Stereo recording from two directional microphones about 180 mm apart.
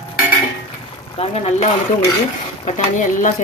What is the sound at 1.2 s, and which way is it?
Speech, 35° left (ahead or behind).